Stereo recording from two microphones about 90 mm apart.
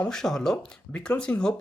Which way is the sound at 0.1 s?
5° left (ahead or behind).